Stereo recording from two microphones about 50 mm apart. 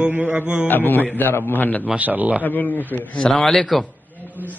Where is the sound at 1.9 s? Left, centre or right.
Right.